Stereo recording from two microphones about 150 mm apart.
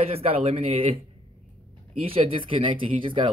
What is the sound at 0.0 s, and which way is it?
Speech, 40° right (ahead or behind).